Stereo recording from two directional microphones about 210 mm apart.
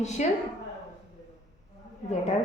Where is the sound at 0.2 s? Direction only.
35° left (ahead or behind).